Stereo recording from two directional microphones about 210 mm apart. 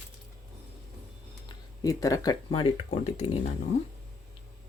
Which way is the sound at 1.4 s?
15° left (ahead or behind).